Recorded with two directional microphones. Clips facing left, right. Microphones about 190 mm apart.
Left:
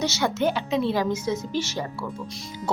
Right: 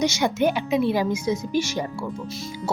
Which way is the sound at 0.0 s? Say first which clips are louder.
Right 3 dB; 15° right (ahead or behind).